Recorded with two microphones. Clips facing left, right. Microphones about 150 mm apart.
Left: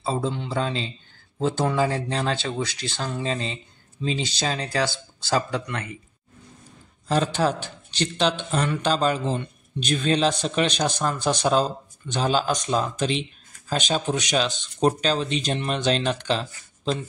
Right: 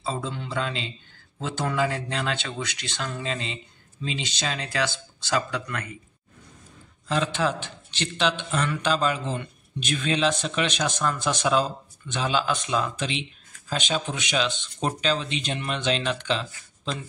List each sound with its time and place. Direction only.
0.0 s a man's voice: 35° left (ahead or behind)
7.1 s a man's voice: 40° left (ahead or behind)